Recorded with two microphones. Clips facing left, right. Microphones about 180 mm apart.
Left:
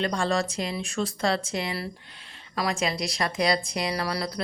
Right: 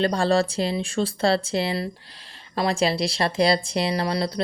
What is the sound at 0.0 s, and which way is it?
A woman's voice, 35° right (ahead or behind).